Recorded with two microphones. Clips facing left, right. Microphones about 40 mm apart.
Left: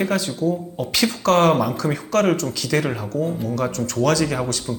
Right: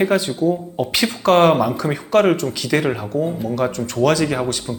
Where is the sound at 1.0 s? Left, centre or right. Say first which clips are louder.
Right 3 dB; centre.